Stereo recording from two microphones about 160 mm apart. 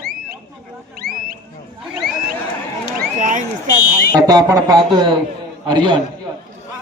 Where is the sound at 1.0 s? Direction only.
75° right (ahead or behind).